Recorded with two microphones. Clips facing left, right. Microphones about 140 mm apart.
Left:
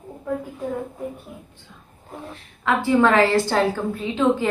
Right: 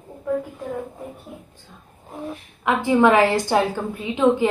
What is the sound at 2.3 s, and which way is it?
A woman's voice, 15° right (ahead or behind).